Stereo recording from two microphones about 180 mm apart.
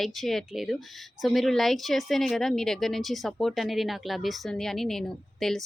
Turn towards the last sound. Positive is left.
turn(degrees=0)  # may be behind; listen again after turning